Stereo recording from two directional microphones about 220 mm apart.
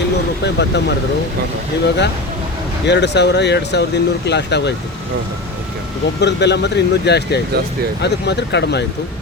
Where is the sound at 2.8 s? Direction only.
50° left (ahead or behind).